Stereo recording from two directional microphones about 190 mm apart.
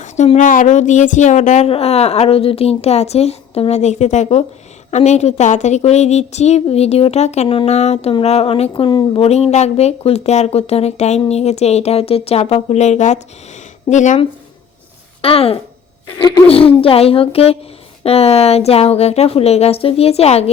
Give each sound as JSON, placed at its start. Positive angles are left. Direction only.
{"t": 0.0, "sound": "a woman's voice", "side_deg": 40}